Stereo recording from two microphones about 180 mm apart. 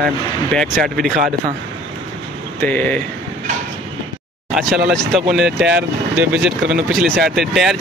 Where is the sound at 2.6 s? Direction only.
10° left (ahead or behind).